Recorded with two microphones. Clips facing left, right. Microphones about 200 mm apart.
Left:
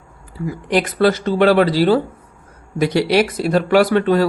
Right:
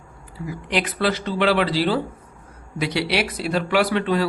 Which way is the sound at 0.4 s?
45° left (ahead or behind).